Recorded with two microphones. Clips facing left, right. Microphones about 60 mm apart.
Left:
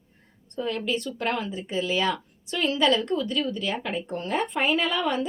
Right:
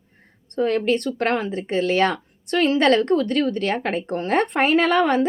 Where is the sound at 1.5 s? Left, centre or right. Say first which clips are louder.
Right 6 dB; right.